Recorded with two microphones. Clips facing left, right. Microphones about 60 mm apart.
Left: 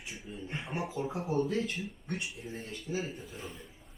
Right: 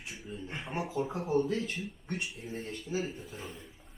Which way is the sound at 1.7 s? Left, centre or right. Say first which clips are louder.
Even; centre.